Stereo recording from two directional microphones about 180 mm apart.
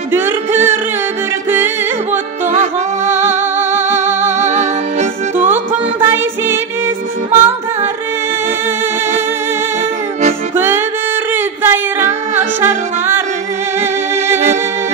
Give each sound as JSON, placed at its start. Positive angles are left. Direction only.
{"t": 0.1, "sound": "music", "side_deg": -10}
{"t": 2.4, "sound": "music", "side_deg": -40}
{"t": 3.1, "sound": "music", "side_deg": -10}
{"t": 10.5, "sound": "music", "side_deg": -10}
{"t": 11.3, "sound": "a sound", "side_deg": -10}
{"t": 12.4, "sound": "music", "side_deg": -10}